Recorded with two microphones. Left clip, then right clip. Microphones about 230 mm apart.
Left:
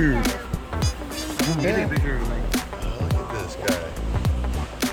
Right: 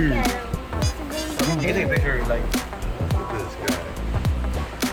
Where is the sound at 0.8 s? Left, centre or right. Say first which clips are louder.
Right 3 dB; centre.